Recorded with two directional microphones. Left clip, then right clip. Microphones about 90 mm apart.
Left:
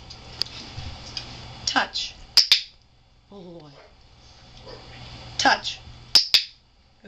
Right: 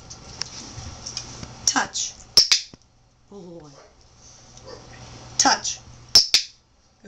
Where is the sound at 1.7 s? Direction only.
5° right (ahead or behind).